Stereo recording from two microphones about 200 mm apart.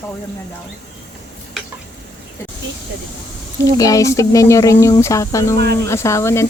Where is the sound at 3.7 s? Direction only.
15° left (ahead or behind).